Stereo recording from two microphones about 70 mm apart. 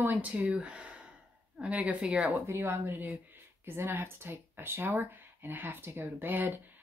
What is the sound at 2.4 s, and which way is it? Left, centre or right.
Speech, right.